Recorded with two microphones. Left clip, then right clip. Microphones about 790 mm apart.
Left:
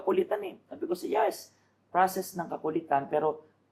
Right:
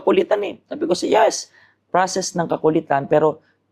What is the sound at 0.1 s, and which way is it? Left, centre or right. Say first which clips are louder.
Speech: right 11 dB; right.